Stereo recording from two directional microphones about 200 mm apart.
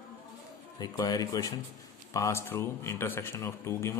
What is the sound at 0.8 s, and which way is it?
Speech, 20° left (ahead or behind).